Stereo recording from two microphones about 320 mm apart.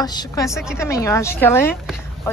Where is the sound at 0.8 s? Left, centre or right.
Centre.